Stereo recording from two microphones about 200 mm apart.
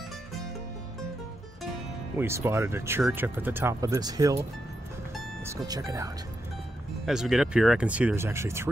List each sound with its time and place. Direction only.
2.1 s speech: 10° right (ahead or behind)
5.4 s speech: 15° right (ahead or behind)
7.1 s speech: centre (ahead or behind)